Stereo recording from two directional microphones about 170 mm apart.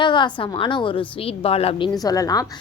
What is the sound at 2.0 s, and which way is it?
Speech, 20° left (ahead or behind).